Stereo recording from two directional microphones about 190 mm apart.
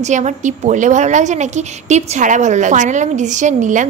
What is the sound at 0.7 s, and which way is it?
A woman's voice, 40° right (ahead or behind).